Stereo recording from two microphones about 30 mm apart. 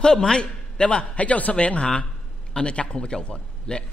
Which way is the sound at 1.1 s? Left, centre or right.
Left.